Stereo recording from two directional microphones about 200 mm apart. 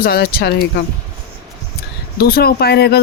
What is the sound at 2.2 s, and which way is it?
Speech, 50° left (ahead or behind).